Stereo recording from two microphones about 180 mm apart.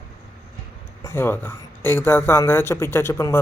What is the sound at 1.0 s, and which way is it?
Speech, 15° left (ahead or behind).